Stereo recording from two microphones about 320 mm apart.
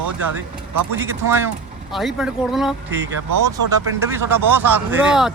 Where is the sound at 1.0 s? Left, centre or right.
Centre.